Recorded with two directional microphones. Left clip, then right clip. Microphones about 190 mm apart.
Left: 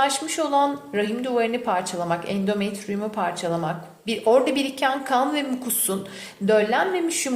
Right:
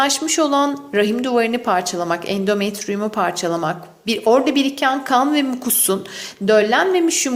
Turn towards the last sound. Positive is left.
turn(degrees=-30)  # may be behind; listen again after turning